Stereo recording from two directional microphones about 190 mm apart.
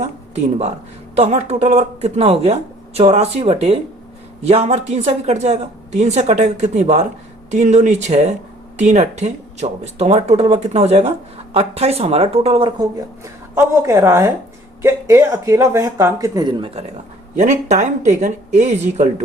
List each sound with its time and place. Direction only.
0.0 s speech: 35° right (ahead or behind)
13.7 s speech: 15° right (ahead or behind)
17.3 s speech: 40° right (ahead or behind)